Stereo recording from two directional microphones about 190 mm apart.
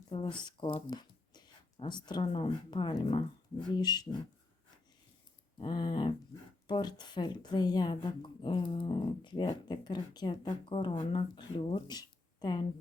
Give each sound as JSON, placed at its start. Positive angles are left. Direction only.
{"t": 0.1, "sound": "speech", "side_deg": 25}
{"t": 5.5, "sound": "speech", "side_deg": 25}